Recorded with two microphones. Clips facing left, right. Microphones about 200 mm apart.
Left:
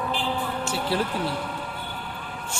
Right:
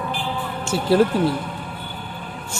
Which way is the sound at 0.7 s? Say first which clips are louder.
Right 11 dB; 45° right (ahead or behind).